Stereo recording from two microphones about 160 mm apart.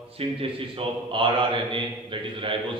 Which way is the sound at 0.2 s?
35° right (ahead or behind).